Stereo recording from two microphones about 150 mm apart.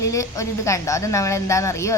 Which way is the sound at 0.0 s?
20° left (ahead or behind).